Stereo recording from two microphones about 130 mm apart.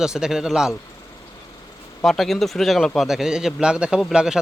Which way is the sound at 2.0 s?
Centre (ahead or behind).